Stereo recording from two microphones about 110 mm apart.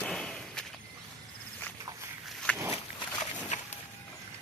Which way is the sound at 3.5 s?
90° left.